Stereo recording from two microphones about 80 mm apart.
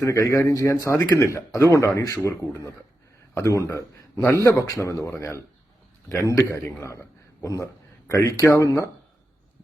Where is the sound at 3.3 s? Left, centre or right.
Left.